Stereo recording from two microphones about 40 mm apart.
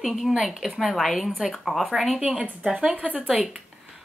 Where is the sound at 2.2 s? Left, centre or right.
Centre.